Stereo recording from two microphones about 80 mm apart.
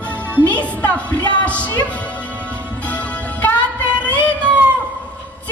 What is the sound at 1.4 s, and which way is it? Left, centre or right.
Music, centre.